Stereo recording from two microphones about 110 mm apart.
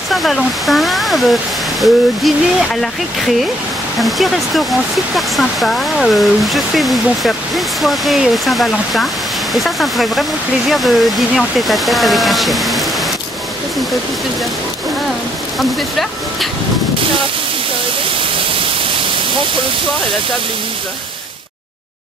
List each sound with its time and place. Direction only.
0.1 s speech: centre (ahead or behind)
4.0 s speech: centre (ahead or behind)